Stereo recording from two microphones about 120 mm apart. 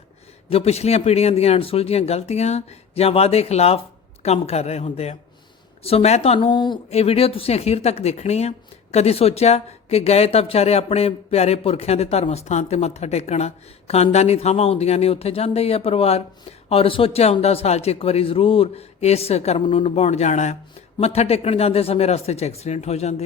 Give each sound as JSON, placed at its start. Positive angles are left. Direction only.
{"t": 0.5, "sound": "speech", "side_deg": 60}
{"t": 6.5, "sound": "a woman's voice", "side_deg": 40}
{"t": 6.9, "sound": "speech", "side_deg": 55}
{"t": 21.0, "sound": "speech", "side_deg": 60}